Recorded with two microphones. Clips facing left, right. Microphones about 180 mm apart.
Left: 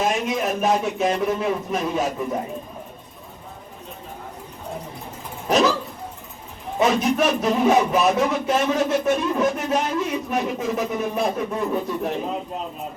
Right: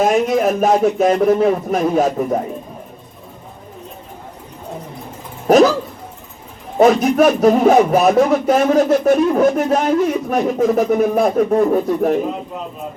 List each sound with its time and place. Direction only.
0.0 s speech: 50° right (ahead or behind)
6.7 s speech: 50° right (ahead or behind)